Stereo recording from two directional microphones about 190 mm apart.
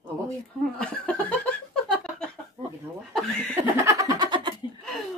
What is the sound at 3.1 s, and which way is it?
Speech, 5° left (ahead or behind).